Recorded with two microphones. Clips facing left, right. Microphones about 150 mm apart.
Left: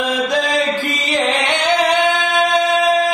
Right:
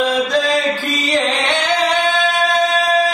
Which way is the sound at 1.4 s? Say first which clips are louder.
Left 1 dB; 15° left (ahead or behind).